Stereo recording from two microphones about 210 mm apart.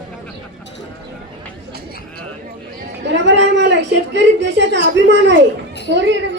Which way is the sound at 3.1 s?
60° right (ahead or behind).